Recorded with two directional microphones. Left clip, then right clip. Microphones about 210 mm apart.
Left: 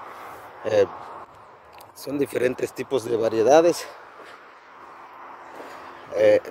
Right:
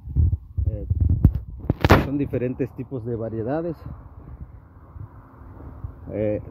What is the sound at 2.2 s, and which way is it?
Speech, 20° left (ahead or behind).